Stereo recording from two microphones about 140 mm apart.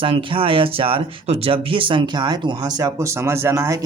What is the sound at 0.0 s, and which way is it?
Speech, 40° right (ahead or behind).